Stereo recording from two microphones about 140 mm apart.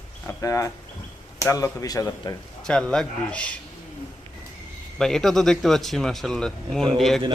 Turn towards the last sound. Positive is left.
turn(degrees=0)  # may be behind; listen again after turning